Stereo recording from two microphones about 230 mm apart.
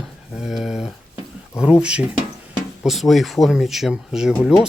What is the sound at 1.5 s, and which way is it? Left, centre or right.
Speech, centre.